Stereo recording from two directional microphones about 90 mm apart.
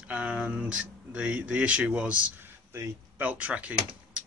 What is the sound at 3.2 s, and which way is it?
Speech, 15° right (ahead or behind).